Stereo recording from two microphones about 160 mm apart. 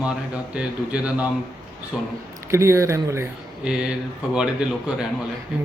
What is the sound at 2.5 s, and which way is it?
Speech, 20° right (ahead or behind).